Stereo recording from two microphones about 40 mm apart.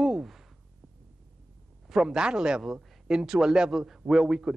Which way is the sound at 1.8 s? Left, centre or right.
Centre.